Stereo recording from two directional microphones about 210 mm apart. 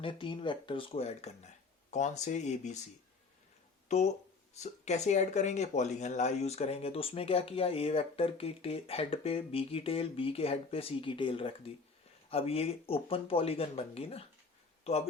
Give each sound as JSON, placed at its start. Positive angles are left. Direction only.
{"t": 0.0, "sound": "speech", "side_deg": 25}
{"t": 3.8, "sound": "speech", "side_deg": 35}